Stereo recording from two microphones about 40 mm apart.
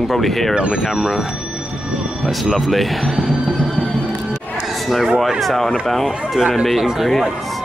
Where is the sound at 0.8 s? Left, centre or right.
Centre.